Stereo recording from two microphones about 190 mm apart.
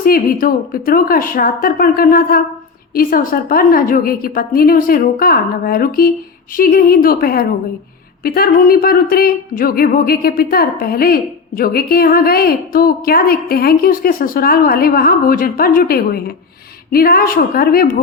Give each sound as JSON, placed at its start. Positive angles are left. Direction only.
{"t": 0.0, "sound": "a woman's voice", "side_deg": 50}